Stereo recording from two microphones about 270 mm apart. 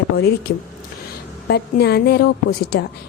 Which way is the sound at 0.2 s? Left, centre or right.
Left.